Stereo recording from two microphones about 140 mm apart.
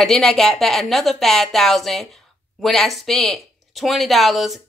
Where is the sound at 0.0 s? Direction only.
Centre (ahead or behind).